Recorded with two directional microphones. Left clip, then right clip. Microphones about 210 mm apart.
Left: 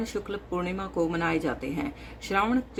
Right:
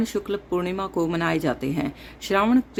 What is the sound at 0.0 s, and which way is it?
Speech, 45° right (ahead or behind).